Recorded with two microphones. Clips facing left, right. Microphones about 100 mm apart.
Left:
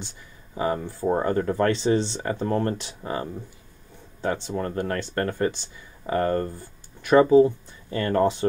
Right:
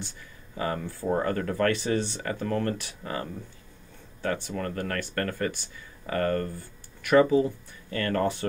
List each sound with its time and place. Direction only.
0.6 s speech: 20° left (ahead or behind)